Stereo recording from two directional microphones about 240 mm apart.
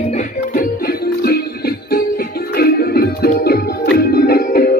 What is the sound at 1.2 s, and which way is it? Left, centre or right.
Music, left.